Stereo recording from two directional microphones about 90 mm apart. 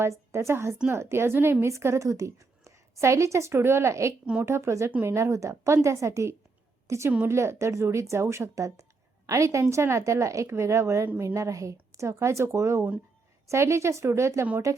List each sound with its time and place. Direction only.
0.3 s a woman's voice: 30° right (ahead or behind)